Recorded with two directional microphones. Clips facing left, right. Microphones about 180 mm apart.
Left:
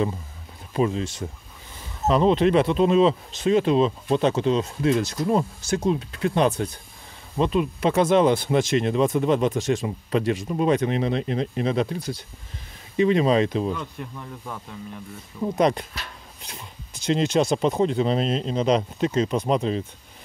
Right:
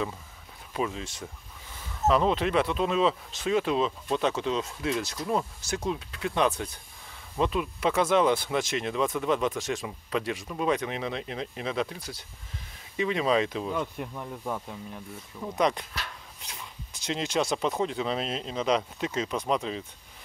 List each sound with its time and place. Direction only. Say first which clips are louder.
0.7 s speech: left 8 dB; 35° left (ahead or behind)
2.0 s speech: left 5 dB; 25° left (ahead or behind)
7.3 s speech: left 5 dB; 25° left (ahead or behind)
13.7 s speech: right 2 dB; 10° right (ahead or behind)
15.5 s speech: left 5 dB; 40° left (ahead or behind)
17.3 s speech: left 6 dB; 25° left (ahead or behind)